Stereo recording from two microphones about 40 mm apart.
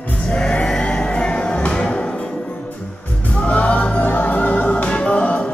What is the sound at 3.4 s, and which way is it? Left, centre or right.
Music, left.